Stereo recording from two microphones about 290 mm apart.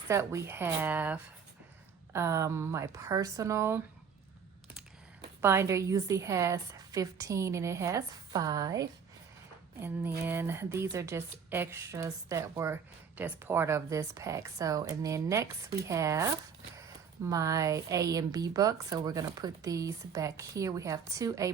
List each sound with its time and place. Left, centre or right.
0.1 s speech: centre
5.4 s speech: centre